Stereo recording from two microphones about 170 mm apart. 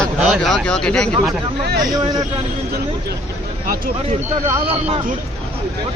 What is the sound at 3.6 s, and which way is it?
Speech, 55° right (ahead or behind).